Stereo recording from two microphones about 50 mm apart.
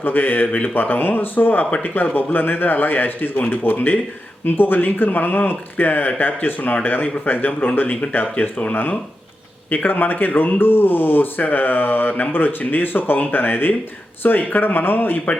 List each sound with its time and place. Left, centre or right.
0.0 s speech: left